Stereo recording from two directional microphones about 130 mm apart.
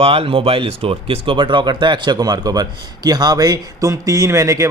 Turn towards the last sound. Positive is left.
turn(degrees=-25)  # may be behind; listen again after turning